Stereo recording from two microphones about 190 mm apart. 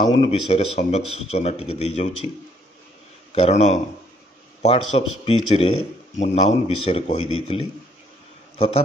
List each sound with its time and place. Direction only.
0.2 s speech: 35° left (ahead or behind)
3.3 s a man's voice: 35° left (ahead or behind)